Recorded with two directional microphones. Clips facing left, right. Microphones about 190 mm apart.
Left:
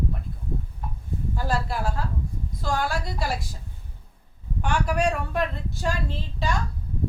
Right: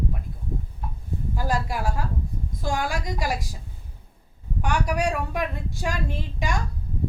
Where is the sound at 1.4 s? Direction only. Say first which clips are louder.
Right 1 dB; 15° right (ahead or behind).